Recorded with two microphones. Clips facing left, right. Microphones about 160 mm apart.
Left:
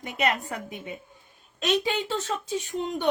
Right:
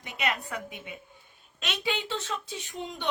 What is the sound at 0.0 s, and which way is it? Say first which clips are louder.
A woman's voice: left 5 dB; 45° left (ahead or behind).